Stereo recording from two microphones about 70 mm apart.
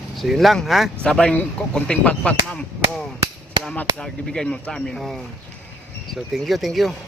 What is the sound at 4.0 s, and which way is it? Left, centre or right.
Speech, centre.